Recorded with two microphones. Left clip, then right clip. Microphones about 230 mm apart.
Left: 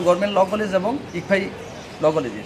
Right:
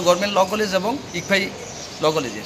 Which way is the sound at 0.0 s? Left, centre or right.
Centre.